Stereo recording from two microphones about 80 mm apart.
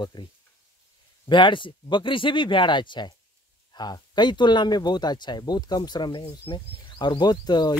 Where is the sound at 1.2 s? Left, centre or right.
Left.